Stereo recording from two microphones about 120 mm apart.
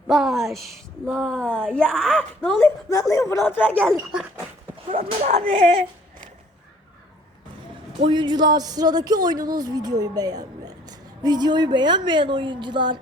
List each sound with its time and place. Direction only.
0.1 s a sound: centre (ahead or behind)
1.0 s speech: 5° left (ahead or behind)
2.6 s speech: 25° left (ahead or behind)
3.4 s speech: 15° left (ahead or behind)
4.9 s speech: 90° right
8.0 s speech: 40° right (ahead or behind)